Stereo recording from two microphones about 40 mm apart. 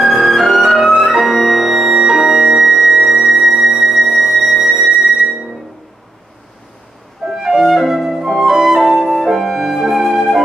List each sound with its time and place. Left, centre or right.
0.0 s music: centre
2.0 s music: centre
2.6 s music: centre
7.2 s music: centre